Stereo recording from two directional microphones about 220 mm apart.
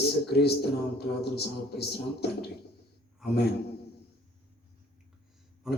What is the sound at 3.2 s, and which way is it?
Speech, centre (ahead or behind).